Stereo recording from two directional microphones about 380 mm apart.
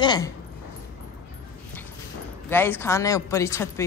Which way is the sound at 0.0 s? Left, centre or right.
Centre.